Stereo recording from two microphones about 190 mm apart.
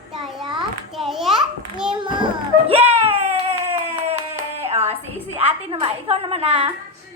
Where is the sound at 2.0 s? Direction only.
25° right (ahead or behind).